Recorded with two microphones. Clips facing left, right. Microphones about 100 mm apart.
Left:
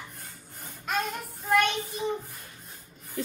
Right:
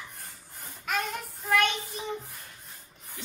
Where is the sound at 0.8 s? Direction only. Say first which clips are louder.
Left 1 dB; centre (ahead or behind).